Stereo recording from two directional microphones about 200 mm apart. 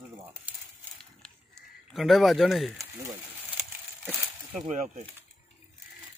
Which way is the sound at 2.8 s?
15° right (ahead or behind).